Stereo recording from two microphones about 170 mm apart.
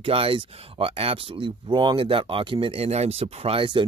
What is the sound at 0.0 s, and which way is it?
Speech, 35° right (ahead or behind).